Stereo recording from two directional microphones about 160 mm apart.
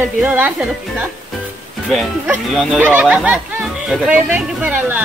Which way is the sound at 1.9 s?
Centre (ahead or behind).